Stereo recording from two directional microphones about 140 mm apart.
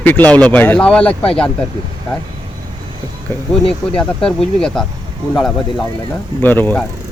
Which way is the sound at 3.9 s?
5° left (ahead or behind).